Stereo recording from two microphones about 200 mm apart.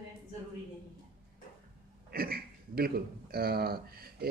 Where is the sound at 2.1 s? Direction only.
50° right (ahead or behind).